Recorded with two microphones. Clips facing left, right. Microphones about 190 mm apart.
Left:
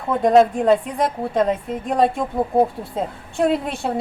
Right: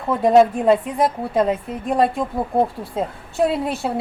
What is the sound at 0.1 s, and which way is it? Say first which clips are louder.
Speech: even; 5° right (ahead or behind).